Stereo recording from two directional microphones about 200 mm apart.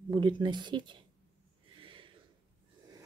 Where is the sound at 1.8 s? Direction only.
25° right (ahead or behind).